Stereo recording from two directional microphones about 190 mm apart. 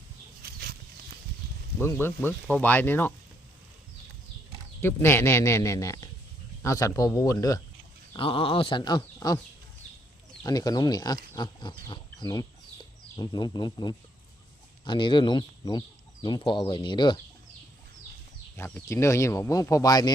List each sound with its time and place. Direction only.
0.4 s a sound: 55° right (ahead or behind)
1.8 s speech: 10° left (ahead or behind)
4.8 s speech: 10° left (ahead or behind)
10.4 s speech: 20° left (ahead or behind)
18.5 s speech: 10° left (ahead or behind)